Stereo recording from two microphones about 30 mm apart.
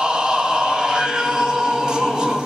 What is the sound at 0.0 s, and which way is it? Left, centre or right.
Choir, right.